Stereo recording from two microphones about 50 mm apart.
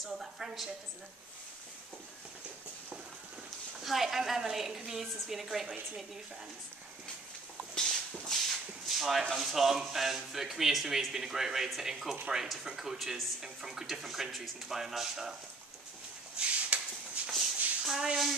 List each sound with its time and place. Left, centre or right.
0.0 s speech: centre
3.8 s speech: centre
8.3 s shuffle: centre
9.3 s speech: centre
16.3 s a sound: right
17.3 s shuffle: centre